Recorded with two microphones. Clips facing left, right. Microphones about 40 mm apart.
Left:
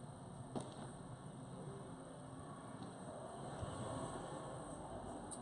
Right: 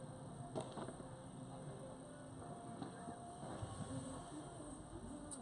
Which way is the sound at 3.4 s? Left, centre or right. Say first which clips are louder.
Left 2 dB; left.